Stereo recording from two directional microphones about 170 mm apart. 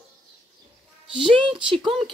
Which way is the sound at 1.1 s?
30° right (ahead or behind).